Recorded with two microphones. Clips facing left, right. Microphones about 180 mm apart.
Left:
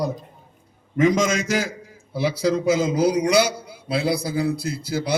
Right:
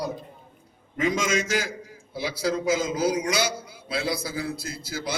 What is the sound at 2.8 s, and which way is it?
A man's voice, 60° left (ahead or behind).